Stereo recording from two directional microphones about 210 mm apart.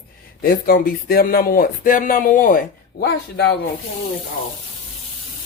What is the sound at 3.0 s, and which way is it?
Speech, 50° left (ahead or behind).